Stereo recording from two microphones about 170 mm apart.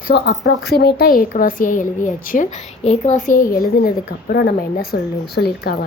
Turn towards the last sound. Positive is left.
turn(degrees=65)  # may be behind; listen again after turning